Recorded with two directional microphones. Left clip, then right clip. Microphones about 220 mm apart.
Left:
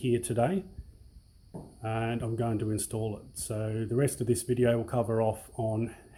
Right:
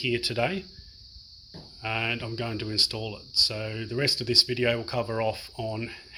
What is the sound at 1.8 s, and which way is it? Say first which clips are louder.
Speech: right 5 dB; centre (ahead or behind).